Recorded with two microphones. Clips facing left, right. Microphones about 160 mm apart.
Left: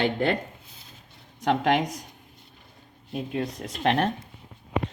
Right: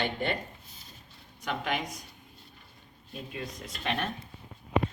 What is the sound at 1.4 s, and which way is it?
Speech, 80° left.